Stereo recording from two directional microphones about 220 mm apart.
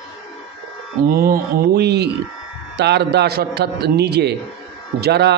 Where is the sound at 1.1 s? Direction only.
40° right (ahead or behind).